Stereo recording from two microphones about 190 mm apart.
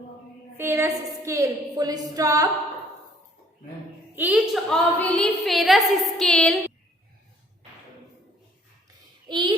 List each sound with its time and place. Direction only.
0.5 s a woman's voice: 15° right (ahead or behind)
4.1 s a woman's voice: 10° right (ahead or behind)
4.7 s a woman's voice: 5° left (ahead or behind)
9.3 s child singing: 25° right (ahead or behind)